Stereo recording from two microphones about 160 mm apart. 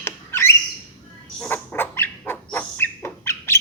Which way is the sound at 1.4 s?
10° left (ahead or behind).